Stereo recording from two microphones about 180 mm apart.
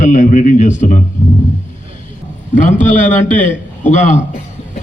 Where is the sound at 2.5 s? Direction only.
45° left (ahead or behind).